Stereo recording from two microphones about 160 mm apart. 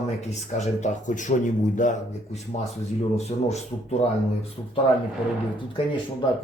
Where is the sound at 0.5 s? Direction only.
50° left (ahead or behind).